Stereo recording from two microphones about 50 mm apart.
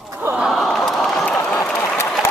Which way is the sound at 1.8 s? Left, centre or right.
Left.